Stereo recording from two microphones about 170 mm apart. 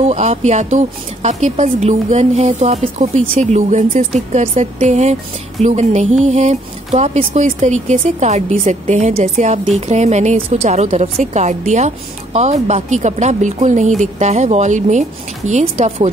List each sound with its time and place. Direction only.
0.0 s a woman's voice: 40° right (ahead or behind)